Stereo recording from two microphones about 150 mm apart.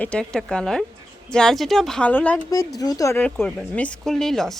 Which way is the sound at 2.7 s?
25° left (ahead or behind).